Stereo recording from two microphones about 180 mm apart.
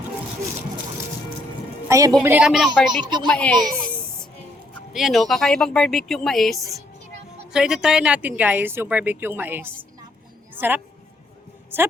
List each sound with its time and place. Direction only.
1.9 s a woman's voice: 20° right (ahead or behind)
2.2 s speech: 5° right (ahead or behind)
4.9 s a woman's voice: centre (ahead or behind)
11.7 s a woman's voice: 10° right (ahead or behind)